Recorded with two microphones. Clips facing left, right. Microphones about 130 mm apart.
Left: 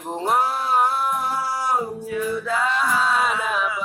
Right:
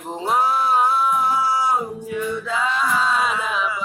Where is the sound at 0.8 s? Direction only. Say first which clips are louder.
Right 2 dB; 60° left (ahead or behind).